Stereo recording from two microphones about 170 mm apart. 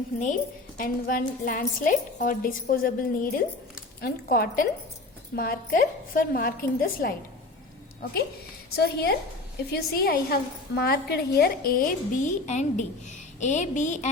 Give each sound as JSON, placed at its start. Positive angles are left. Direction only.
{"t": 0.8, "sound": "a woman's voice", "side_deg": 55}
{"t": 8.7, "sound": "a woman's voice", "side_deg": 70}